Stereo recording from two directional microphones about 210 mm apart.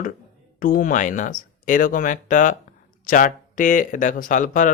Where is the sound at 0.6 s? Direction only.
40° left (ahead or behind).